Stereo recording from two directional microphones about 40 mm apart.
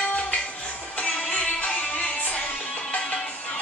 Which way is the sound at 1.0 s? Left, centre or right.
Left.